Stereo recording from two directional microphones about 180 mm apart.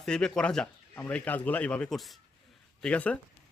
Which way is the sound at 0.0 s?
5° left (ahead or behind).